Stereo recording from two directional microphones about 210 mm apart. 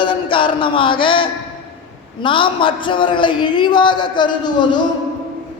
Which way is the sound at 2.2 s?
25° left (ahead or behind).